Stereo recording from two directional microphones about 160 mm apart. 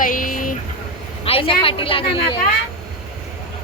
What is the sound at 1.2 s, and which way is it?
A woman's voice, 35° left (ahead or behind).